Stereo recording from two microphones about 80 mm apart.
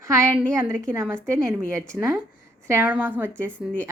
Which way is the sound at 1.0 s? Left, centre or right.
Right.